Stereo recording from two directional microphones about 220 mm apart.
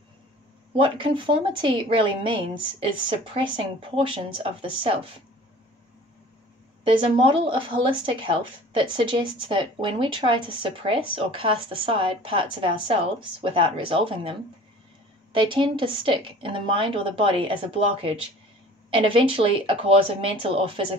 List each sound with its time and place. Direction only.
0.7 s speech: 25° right (ahead or behind)
6.8 s speech: 25° right (ahead or behind)
15.3 s speech: 20° right (ahead or behind)